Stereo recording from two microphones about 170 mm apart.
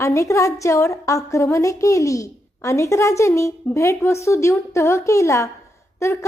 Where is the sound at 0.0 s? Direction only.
20° left (ahead or behind).